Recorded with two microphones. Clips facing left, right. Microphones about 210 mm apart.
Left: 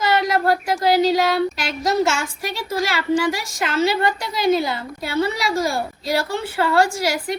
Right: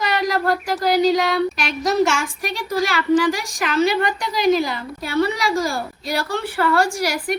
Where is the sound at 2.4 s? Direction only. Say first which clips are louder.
Right 1 dB; 25° left (ahead or behind).